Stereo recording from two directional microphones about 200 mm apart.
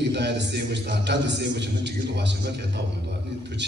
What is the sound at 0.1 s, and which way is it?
A man's voice, 60° right (ahead or behind).